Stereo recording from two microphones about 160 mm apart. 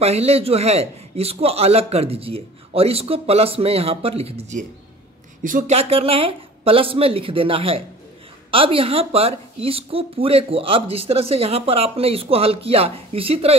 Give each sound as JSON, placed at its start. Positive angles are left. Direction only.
{"t": 0.0, "sound": "a woman's voice", "side_deg": -40}
{"t": 5.4, "sound": "a woman's voice", "side_deg": -55}